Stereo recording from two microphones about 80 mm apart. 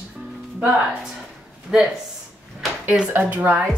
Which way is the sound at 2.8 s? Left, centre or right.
Centre.